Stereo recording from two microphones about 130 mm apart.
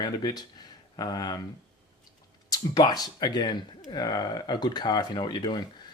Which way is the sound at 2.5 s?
30° left (ahead or behind).